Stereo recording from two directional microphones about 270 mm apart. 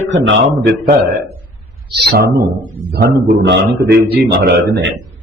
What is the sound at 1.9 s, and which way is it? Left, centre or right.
Speech, right.